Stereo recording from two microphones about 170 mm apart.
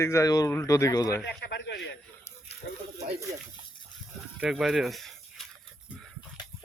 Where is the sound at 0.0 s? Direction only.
15° left (ahead or behind).